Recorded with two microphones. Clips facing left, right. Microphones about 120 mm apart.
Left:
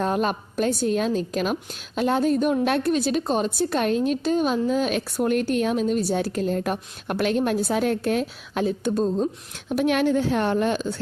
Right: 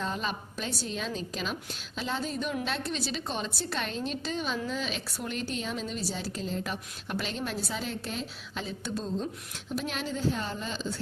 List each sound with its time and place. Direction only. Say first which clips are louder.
0.0 s a woman's voice: left 10 dB; 55° left (ahead or behind)
9.6 s a woman's voice: left 13 dB; 70° left (ahead or behind)